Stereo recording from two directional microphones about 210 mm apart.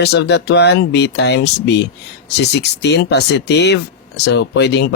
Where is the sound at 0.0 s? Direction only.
50° left (ahead or behind).